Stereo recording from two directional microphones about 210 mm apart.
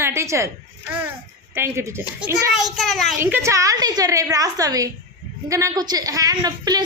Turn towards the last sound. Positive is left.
turn(degrees=-20)  # may be behind; listen again after turning